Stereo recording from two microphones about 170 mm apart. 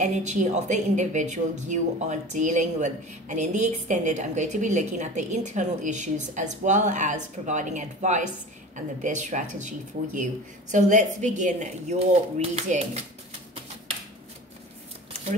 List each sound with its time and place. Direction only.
0.0 s a woman's voice: 45° right (ahead or behind)